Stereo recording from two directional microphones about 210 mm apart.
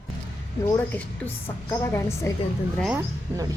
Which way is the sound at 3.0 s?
15° right (ahead or behind).